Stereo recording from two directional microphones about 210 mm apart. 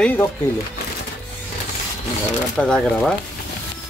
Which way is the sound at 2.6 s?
5° left (ahead or behind).